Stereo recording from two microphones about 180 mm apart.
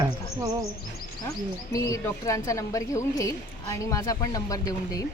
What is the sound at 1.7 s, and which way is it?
Speech, 15° left (ahead or behind).